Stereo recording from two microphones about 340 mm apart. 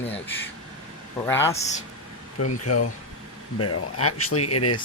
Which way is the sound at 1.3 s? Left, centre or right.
Centre.